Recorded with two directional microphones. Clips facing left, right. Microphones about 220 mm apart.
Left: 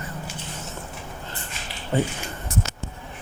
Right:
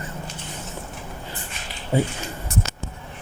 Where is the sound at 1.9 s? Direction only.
10° right (ahead or behind).